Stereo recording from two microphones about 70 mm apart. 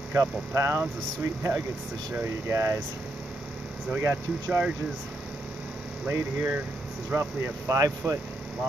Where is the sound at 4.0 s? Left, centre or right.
Right.